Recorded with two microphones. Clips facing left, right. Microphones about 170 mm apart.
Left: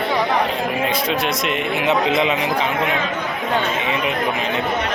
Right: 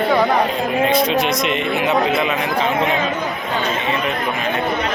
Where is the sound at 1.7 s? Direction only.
20° left (ahead or behind).